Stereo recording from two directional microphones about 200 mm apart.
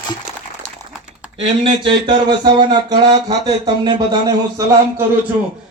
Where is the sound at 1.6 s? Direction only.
25° right (ahead or behind).